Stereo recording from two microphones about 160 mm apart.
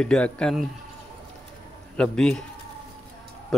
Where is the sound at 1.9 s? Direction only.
5° left (ahead or behind).